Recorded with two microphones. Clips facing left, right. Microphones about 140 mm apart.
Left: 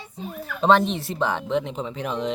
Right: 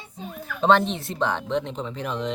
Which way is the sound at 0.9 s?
Centre (ahead or behind).